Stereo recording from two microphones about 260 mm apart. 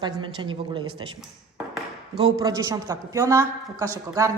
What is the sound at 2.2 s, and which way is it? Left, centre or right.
Speech, centre.